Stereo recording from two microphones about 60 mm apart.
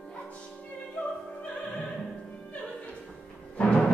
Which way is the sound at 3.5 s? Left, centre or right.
Centre.